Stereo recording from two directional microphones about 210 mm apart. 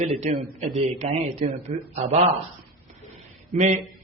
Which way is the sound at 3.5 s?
35° right (ahead or behind).